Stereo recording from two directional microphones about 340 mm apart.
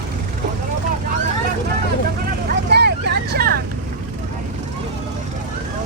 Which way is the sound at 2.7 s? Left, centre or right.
Right.